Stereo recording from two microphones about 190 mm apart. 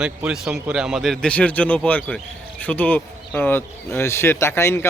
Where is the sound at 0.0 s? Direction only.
5° right (ahead or behind).